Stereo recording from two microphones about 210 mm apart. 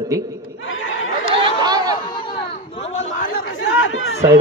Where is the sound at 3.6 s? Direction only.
70° left (ahead or behind).